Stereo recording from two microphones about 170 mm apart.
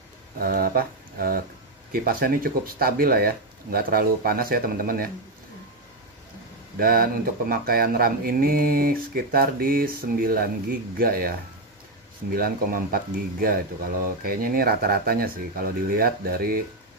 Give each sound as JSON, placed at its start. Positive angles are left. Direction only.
{"t": 0.4, "sound": "speech", "side_deg": -60}
{"t": 6.8, "sound": "speech", "side_deg": -60}
{"t": 12.4, "sound": "speech", "side_deg": -60}